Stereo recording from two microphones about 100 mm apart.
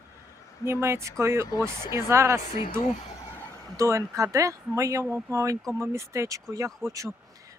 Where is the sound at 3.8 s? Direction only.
30° right (ahead or behind).